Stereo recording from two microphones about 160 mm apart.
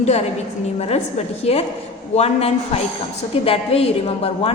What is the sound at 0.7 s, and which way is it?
A woman's voice, 40° left (ahead or behind).